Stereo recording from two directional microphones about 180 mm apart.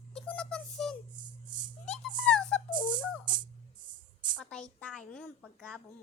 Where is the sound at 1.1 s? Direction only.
25° right (ahead or behind).